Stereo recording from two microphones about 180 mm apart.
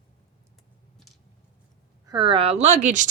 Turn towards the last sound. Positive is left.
turn(degrees=-45)  # may be behind; listen again after turning